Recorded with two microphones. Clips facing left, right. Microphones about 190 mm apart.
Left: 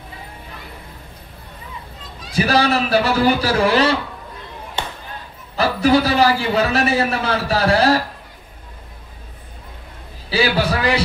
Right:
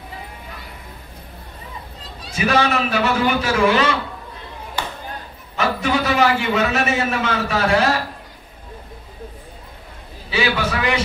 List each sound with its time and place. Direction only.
2.3 s a man's voice: 35° left (ahead or behind)
4.8 s music: 25° left (ahead or behind)
5.6 s a man's voice: 35° left (ahead or behind)
10.3 s a man's voice: 35° left (ahead or behind)